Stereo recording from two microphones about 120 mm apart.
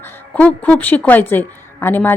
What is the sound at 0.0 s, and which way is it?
A woman's voice, 20° left (ahead or behind).